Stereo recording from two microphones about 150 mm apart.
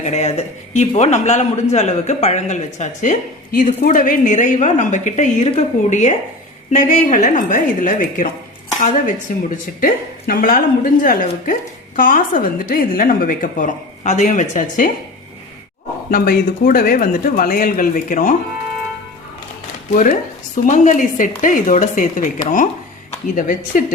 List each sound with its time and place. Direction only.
0.0 s a man's voice: 50° left (ahead or behind)
9.8 s a woman's voice: 70° left (ahead or behind)
16.0 s speech: 80° left; by 18.3 s 60° left (ahead or behind)
20.7 s a woman's voice: 55° left (ahead or behind)